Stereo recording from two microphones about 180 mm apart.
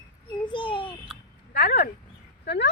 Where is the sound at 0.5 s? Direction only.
30° left (ahead or behind).